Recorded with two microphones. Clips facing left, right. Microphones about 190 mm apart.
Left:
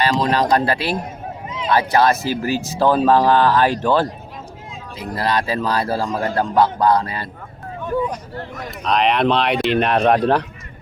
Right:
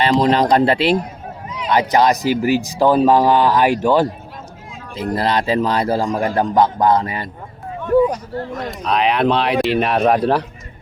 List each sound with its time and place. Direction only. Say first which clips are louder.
0.0 s a man's voice: right 3 dB; 25° right (ahead or behind)
4.9 s a man's voice: right 3 dB; 25° right (ahead or behind)
8.8 s speech: even; centre (ahead or behind)